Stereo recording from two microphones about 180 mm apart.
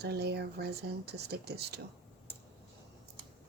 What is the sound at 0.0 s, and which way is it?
Speech, 65° right (ahead or behind).